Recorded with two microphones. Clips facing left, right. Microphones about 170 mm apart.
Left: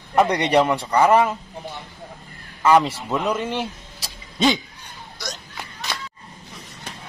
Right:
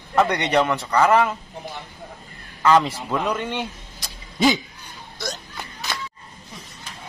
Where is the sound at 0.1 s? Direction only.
10° left (ahead or behind).